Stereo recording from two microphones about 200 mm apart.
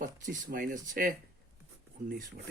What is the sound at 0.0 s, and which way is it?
Speech, 40° right (ahead or behind).